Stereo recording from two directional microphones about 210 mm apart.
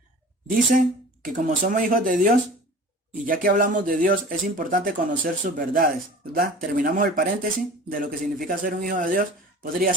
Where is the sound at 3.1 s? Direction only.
40° right (ahead or behind).